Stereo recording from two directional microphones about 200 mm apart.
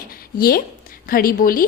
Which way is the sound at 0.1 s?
45° left (ahead or behind).